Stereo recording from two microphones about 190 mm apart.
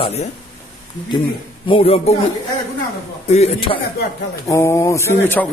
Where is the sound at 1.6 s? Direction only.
30° left (ahead or behind).